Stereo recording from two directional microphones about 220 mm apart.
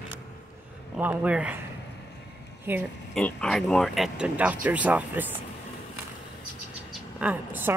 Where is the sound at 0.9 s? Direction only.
5° right (ahead or behind).